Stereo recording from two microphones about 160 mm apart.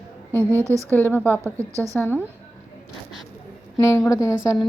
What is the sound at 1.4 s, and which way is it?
Speech, 20° right (ahead or behind).